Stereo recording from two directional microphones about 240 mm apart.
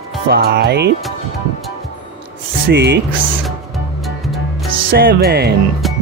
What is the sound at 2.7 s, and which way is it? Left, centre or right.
Speech, right.